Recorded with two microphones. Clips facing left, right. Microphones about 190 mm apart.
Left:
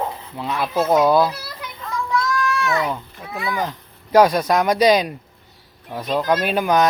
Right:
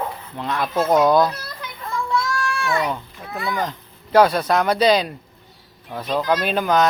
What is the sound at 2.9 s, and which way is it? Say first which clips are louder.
Speech: even; centre (ahead or behind).